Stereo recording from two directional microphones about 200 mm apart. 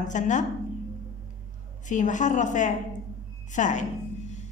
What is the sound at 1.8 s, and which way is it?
Speech, 40° left (ahead or behind).